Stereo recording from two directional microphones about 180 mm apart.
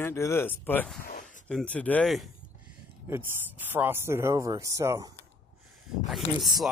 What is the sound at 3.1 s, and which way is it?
Speech, 10° right (ahead or behind).